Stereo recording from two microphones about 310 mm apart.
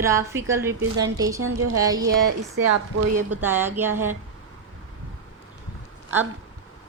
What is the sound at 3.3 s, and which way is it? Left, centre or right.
Speech, centre.